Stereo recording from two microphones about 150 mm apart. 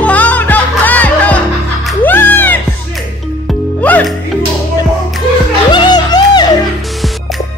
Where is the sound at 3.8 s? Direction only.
10° left (ahead or behind).